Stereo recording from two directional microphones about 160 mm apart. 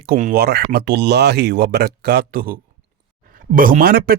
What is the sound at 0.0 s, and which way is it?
Speech, 60° right (ahead or behind).